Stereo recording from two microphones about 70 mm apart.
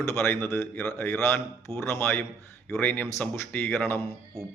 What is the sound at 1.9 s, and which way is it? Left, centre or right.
Speech, left.